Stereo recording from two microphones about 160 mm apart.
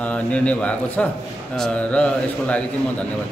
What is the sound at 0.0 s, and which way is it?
A man's voice, 10° left (ahead or behind).